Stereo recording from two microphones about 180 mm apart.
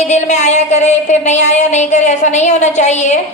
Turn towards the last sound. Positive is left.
turn(degrees=40)  # may be behind; listen again after turning